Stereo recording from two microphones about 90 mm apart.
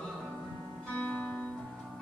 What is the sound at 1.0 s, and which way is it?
Music, 15° left (ahead or behind).